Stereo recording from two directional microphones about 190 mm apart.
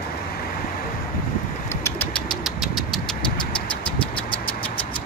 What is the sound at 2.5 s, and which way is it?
Vehicle, centre (ahead or behind).